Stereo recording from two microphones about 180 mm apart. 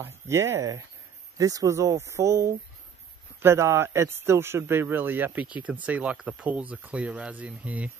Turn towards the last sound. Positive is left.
turn(degrees=-10)  # may be behind; listen again after turning